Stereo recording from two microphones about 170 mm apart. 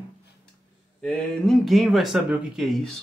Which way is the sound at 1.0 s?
5° left (ahead or behind).